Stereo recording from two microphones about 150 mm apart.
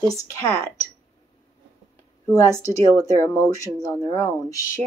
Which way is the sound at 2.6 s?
20° left (ahead or behind).